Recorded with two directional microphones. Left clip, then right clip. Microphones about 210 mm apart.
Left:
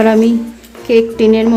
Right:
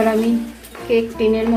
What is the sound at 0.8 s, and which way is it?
Speech, 55° left (ahead or behind).